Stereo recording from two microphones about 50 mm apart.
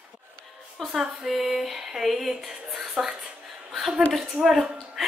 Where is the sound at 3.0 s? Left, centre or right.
Centre.